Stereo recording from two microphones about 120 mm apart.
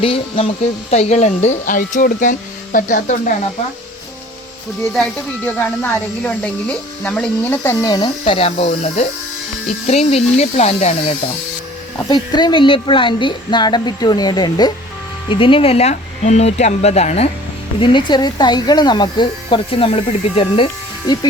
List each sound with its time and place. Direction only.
0.0 s speech: 50° left (ahead or behind); by 3.3 s 90° left
5.5 s speech: 15° left (ahead or behind)
7.6 s speech: 20° left (ahead or behind)
7.9 s speech: 35° left (ahead or behind)
8.2 s speech: 50° left (ahead or behind)
12.0 s speech: 35° left (ahead or behind)
15.3 s speech: 45° left (ahead or behind); by 17.2 s 65° left (ahead or behind)
17.7 s speech: 40° left (ahead or behind)
21.1 s speech: 35° left (ahead or behind)